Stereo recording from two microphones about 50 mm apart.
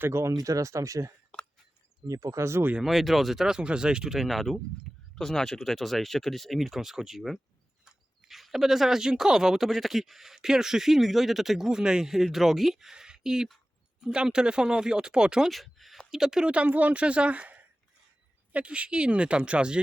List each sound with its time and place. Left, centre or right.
0.0 s speech: right
1.3 s a sound: left
2.2 s speech: right
2.8 s speech: centre
4.1 s speech: centre
15.4 s speech: centre
16.0 s speech: centre
16.5 s speech: right